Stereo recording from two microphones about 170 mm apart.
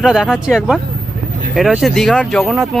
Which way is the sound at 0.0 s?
5° right (ahead or behind).